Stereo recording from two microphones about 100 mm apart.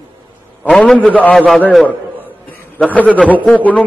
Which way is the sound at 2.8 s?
15° left (ahead or behind).